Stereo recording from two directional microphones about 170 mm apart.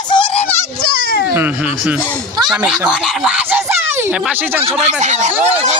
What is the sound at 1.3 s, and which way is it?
Speech, 10° right (ahead or behind).